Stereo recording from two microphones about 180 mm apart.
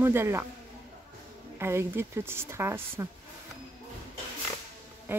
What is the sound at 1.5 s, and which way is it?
Speech, 15° right (ahead or behind).